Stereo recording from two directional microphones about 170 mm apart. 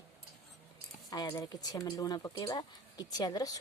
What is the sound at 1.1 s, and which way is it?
Speech, 20° left (ahead or behind).